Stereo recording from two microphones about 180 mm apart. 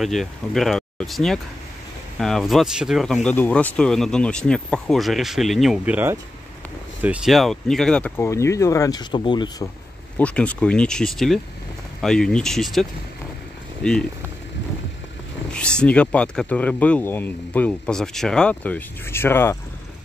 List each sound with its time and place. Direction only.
0.0 s speech: centre (ahead or behind)
7.0 s speech: 5° right (ahead or behind); by 9.7 s 25° left (ahead or behind)
10.1 s speech: 5° left (ahead or behind)
15.5 s speech: 5° left (ahead or behind)